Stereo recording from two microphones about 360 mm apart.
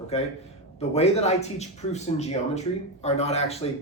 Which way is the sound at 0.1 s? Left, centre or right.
Centre.